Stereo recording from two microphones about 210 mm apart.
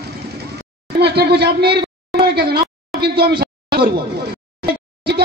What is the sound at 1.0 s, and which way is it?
Speech, 50° right (ahead or behind).